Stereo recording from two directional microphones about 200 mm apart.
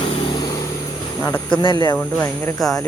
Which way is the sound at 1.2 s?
20° left (ahead or behind).